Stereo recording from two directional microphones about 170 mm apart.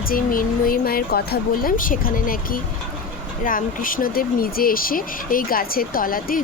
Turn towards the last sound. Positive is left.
turn(degrees=55)  # may be behind; listen again after turning